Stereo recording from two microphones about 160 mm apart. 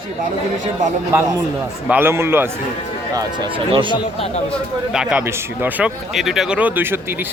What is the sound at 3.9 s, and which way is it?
Speech, 35° left (ahead or behind).